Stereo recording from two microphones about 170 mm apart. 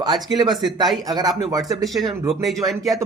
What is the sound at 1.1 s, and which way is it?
Speech, 20° right (ahead or behind).